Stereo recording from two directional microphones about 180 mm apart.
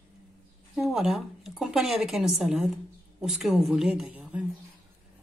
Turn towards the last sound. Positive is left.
turn(degrees=-5)  # may be behind; listen again after turning